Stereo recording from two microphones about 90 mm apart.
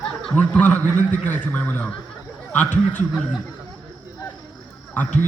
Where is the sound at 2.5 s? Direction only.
20° left (ahead or behind).